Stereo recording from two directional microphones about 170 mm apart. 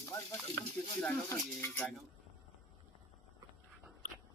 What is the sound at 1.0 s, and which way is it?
Speech, 10° left (ahead or behind).